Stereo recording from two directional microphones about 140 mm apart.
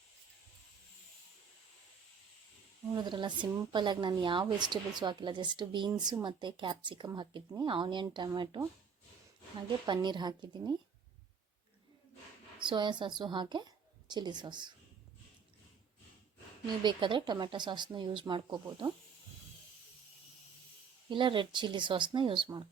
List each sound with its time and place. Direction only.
2.9 s speech: 30° right (ahead or behind)
9.8 s speech: 35° right (ahead or behind)
12.5 s a woman's voice: 35° right (ahead or behind)
16.8 s speech: 35° right (ahead or behind)
21.1 s speech: 35° right (ahead or behind)